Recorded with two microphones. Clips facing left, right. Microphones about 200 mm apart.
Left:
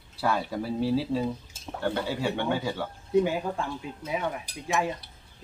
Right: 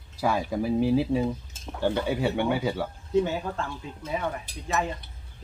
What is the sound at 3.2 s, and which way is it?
Cutlery, 10° left (ahead or behind).